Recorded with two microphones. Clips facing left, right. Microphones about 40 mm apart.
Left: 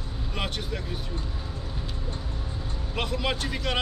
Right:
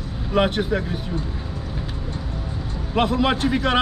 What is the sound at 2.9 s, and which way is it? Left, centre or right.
Speech, right.